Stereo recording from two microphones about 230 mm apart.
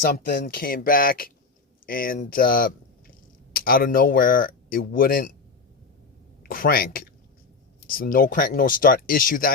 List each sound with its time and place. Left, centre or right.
0.0 s speech: left
6.5 s speech: left